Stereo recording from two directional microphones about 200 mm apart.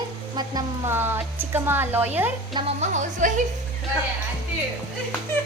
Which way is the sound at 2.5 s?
30° right (ahead or behind).